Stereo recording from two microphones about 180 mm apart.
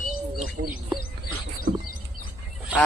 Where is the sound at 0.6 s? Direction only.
45° right (ahead or behind).